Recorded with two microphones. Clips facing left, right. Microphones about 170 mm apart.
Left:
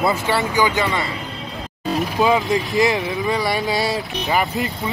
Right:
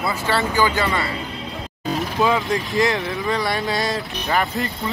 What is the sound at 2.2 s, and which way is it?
Speech, 15° left (ahead or behind).